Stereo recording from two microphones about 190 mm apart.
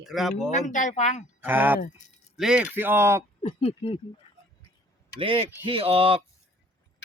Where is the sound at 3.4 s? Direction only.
35° left (ahead or behind).